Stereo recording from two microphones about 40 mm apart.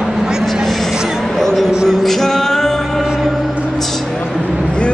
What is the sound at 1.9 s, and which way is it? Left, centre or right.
Music, centre.